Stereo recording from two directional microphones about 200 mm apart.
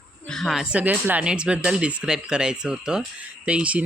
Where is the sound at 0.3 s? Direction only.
Centre (ahead or behind).